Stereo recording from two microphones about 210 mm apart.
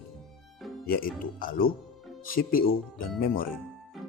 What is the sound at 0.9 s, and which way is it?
Speech, 45° left (ahead or behind).